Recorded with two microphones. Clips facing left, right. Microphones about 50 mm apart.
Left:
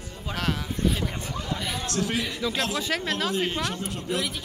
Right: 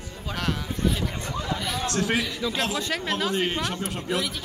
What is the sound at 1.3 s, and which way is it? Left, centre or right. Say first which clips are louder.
Speech: right 2 dB; right.